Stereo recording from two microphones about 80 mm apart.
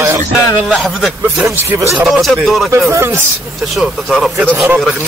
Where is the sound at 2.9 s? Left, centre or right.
Right.